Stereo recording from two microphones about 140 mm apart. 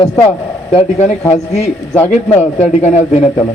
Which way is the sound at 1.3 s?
50° left (ahead or behind).